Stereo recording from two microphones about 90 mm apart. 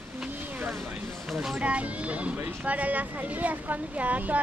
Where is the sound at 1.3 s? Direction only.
5° right (ahead or behind).